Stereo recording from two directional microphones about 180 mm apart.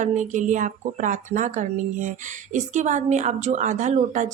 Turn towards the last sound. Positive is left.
turn(degrees=-45)  # may be behind; listen again after turning